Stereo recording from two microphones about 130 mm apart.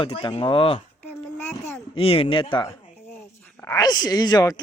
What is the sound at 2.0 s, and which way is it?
Speech, 45° left (ahead or behind).